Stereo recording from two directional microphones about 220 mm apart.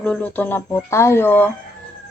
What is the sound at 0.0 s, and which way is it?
Speech, 5° left (ahead or behind).